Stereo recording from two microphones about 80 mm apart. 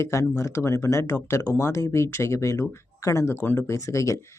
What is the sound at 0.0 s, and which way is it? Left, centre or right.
Speech, left.